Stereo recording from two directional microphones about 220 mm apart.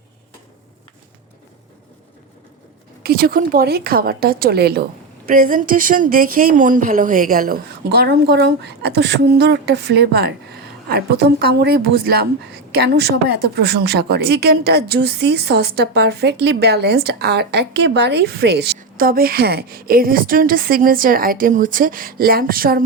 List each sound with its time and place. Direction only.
3.0 s speech: 40° right (ahead or behind)